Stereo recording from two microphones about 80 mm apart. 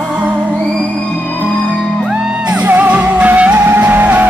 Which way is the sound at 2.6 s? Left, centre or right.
Right.